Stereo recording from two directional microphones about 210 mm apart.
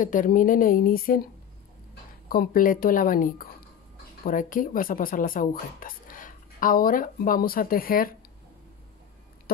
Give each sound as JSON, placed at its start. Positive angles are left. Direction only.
{"t": 0.0, "sound": "speech", "side_deg": 40}
{"t": 2.2, "sound": "speech", "side_deg": 45}